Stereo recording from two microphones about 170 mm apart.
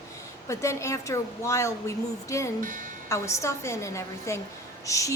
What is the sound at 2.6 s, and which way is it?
Speech, 50° right (ahead or behind).